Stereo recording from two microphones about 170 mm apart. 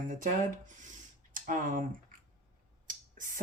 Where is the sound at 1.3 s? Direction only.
50° right (ahead or behind).